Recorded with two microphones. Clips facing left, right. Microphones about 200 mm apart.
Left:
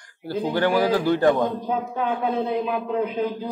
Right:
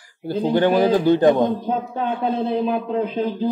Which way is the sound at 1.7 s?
30° right (ahead or behind).